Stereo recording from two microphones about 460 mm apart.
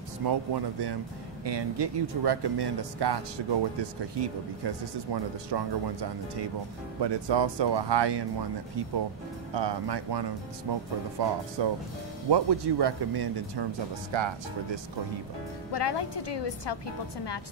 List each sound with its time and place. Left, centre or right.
0.2 s speech: right
7.0 s speech: right
9.5 s speech: right
14.1 s speech: right
15.7 s a woman's voice: left